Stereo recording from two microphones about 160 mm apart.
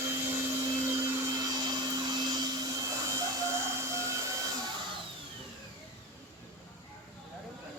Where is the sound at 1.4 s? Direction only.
25° right (ahead or behind).